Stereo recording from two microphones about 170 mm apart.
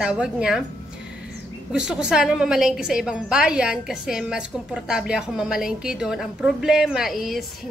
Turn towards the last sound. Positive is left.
turn(degrees=0)  # may be behind; listen again after turning